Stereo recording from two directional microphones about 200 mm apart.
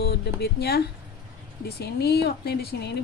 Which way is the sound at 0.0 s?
55° left (ahead or behind).